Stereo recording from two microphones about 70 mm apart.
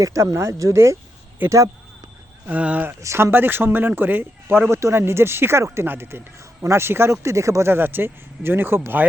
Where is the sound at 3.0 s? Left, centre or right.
Right.